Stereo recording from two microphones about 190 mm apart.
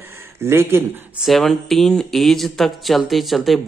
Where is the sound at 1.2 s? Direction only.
Centre (ahead or behind).